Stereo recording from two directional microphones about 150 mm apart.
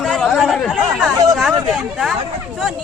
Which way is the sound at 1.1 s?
25° right (ahead or behind).